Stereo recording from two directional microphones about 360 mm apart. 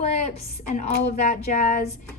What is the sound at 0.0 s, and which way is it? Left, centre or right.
Speech, centre.